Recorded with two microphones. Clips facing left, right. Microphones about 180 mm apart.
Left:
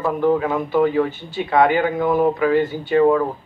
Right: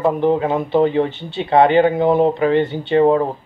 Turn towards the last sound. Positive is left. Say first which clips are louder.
# right 2 dB
turn(degrees=-25)  # may be behind; listen again after turning